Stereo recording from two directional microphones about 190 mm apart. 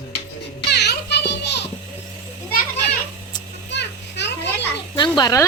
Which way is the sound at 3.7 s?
65° left (ahead or behind).